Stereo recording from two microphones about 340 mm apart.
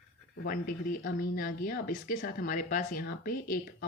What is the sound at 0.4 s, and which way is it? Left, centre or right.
Speech, left.